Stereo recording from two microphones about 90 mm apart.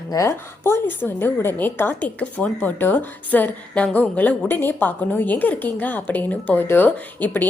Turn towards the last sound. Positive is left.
turn(degrees=20)  # may be behind; listen again after turning